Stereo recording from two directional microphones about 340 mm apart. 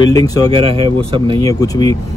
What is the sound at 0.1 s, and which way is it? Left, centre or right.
Speech, centre.